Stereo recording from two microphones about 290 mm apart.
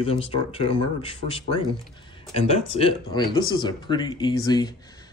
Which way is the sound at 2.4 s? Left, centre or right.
Left.